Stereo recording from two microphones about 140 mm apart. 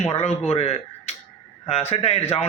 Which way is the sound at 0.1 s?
45° left (ahead or behind).